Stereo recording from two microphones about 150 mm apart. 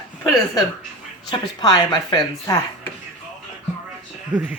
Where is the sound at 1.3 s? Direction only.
30° left (ahead or behind).